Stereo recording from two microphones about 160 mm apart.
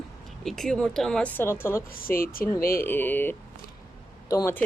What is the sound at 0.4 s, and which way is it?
Speech, 5° left (ahead or behind).